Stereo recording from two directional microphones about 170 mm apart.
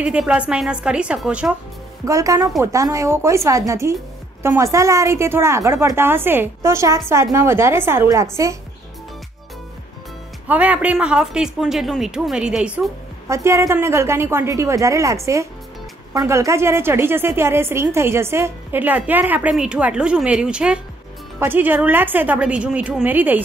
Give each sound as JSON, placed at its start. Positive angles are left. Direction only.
{"t": 0.0, "sound": "a woman's voice", "side_deg": -5}
{"t": 2.0, "sound": "a woman's voice", "side_deg": -20}
{"t": 10.5, "sound": "a woman's voice", "side_deg": -10}